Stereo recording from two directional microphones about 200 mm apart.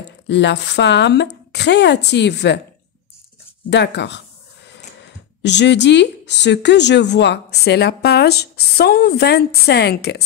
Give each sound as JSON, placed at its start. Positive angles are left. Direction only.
{"t": 0.3, "sound": "speech", "side_deg": 60}
{"t": 3.7, "sound": "speech", "side_deg": 60}